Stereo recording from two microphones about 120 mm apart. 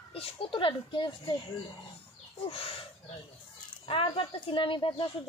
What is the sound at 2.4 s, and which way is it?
Speech, 50° left (ahead or behind).